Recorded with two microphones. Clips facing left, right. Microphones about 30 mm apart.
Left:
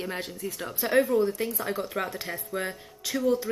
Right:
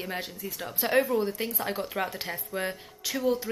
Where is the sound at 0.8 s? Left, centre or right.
Right.